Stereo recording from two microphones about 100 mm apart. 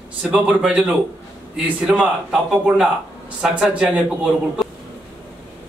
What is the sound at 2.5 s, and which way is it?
A man's voice, 10° right (ahead or behind).